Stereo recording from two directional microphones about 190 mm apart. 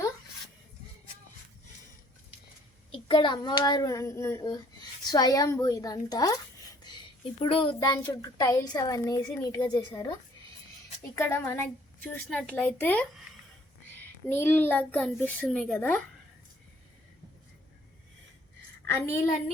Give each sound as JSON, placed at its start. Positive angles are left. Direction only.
{"t": 2.9, "sound": "a child's voice", "side_deg": 25}
{"t": 7.4, "sound": "a child's voice", "side_deg": 30}
{"t": 18.9, "sound": "a child's voice", "side_deg": 10}